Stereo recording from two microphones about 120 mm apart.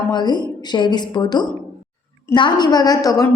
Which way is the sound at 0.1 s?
35° left (ahead or behind).